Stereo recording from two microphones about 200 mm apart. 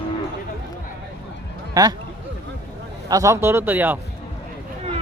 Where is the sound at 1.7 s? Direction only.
20° right (ahead or behind).